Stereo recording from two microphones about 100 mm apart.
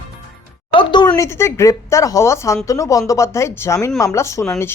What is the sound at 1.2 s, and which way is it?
Speech, 30° left (ahead or behind).